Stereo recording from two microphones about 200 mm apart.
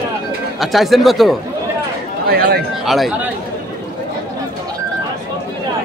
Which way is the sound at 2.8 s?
Centre (ahead or behind).